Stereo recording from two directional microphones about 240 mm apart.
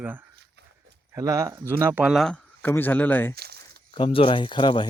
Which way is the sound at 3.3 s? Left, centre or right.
Right.